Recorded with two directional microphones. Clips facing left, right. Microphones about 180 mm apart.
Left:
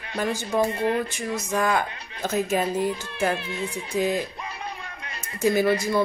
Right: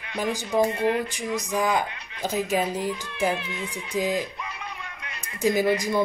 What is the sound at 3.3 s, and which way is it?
Speech, 35° left (ahead or behind).